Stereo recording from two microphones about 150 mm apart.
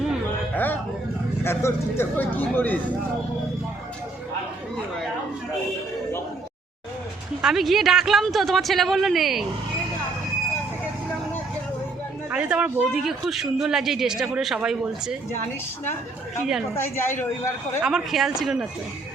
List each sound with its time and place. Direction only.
0.5 s music: 10° left (ahead or behind)
1.5 s speech: 15° left (ahead or behind)
7.4 s speech: centre (ahead or behind)
12.3 s speech: 5° right (ahead or behind)
16.7 s speech: 15° left (ahead or behind)
17.8 s speech: centre (ahead or behind)